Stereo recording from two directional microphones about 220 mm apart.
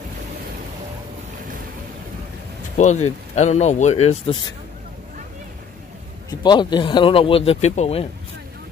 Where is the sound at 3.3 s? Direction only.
30° left (ahead or behind).